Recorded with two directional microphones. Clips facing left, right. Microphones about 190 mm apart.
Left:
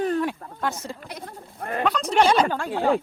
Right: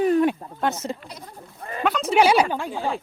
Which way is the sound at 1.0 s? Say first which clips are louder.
Left 3 dB; 60° left (ahead or behind).